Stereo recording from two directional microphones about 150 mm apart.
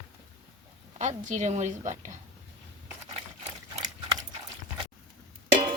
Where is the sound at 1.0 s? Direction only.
50° right (ahead or behind).